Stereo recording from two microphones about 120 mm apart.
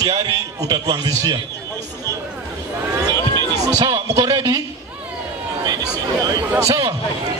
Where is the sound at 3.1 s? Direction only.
30° right (ahead or behind).